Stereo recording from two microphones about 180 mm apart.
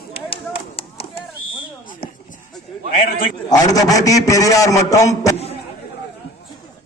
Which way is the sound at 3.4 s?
20° left (ahead or behind).